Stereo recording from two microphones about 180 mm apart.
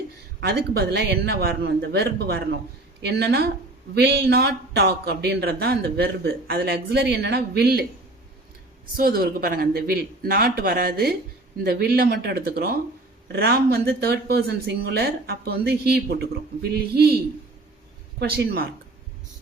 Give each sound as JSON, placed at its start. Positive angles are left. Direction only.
{"t": 0.3, "sound": "speech", "side_deg": -60}
{"t": 9.0, "sound": "speech", "side_deg": -55}
{"t": 18.2, "sound": "speech", "side_deg": -60}